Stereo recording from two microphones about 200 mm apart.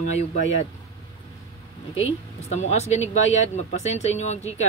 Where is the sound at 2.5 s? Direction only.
35° left (ahead or behind).